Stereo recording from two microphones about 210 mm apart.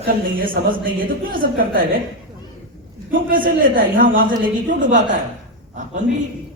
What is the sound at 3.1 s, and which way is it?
A man's voice, 40° right (ahead or behind).